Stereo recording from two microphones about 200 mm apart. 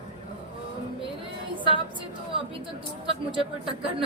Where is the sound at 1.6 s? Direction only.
25° left (ahead or behind).